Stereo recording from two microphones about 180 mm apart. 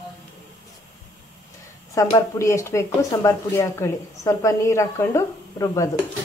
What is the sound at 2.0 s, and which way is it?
Speech, 15° left (ahead or behind).